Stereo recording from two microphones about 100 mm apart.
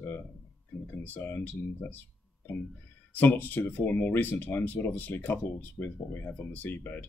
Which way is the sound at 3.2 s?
20° left (ahead or behind).